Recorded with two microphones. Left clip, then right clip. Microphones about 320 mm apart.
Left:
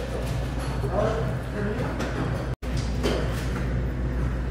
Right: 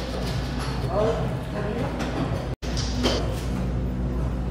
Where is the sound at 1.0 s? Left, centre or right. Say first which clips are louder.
Right 2 dB; centre.